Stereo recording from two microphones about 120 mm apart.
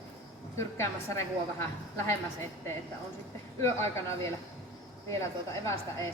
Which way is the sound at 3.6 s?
20° left (ahead or behind).